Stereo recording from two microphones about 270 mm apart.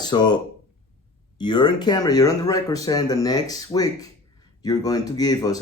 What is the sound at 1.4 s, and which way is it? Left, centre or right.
Speech, centre.